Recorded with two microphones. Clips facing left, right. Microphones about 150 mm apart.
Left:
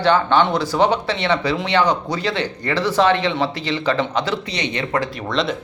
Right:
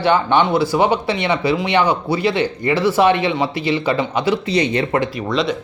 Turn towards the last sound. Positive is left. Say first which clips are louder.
# right 2 dB
turn(degrees=0)  # may be behind; listen again after turning